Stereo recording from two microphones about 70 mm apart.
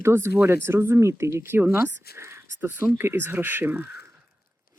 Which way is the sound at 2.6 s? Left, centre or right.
Right.